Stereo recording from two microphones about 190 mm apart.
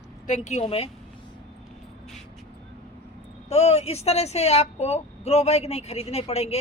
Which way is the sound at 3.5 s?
35° left (ahead or behind).